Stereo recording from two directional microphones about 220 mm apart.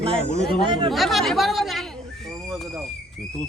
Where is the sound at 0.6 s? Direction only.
20° right (ahead or behind).